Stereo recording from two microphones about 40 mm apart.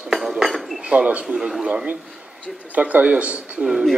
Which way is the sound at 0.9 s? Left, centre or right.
Right.